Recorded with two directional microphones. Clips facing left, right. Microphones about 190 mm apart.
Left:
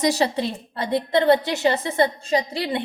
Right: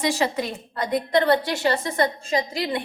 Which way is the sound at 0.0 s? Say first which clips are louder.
Left 3 dB; 40° left (ahead or behind).